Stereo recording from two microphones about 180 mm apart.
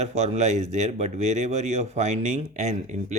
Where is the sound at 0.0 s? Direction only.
35° right (ahead or behind).